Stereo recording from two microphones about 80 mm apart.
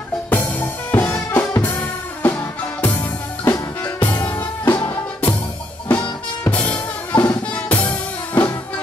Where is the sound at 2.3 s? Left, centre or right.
Left.